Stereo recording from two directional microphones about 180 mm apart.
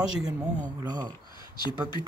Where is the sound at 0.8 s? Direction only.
20° right (ahead or behind).